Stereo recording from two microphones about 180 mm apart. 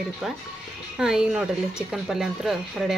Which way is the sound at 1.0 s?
5° right (ahead or behind).